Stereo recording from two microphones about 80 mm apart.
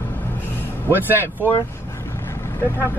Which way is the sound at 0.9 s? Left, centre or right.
Right.